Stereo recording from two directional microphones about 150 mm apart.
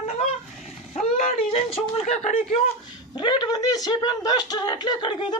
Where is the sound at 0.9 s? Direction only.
45° left (ahead or behind).